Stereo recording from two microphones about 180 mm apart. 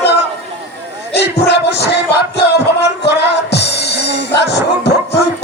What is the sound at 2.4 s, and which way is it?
Music, 70° left (ahead or behind).